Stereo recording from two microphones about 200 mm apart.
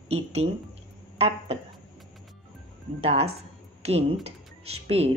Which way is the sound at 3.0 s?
30° right (ahead or behind).